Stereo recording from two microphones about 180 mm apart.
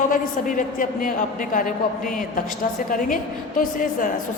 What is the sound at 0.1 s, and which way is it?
A woman's voice, 50° left (ahead or behind).